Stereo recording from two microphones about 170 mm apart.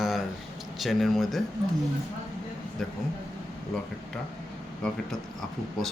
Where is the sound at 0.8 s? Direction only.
Centre (ahead or behind).